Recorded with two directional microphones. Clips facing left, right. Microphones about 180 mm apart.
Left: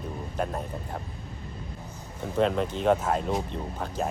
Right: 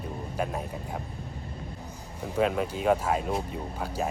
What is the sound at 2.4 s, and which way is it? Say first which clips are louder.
Speech: left 1 dB; 5° right (ahead or behind).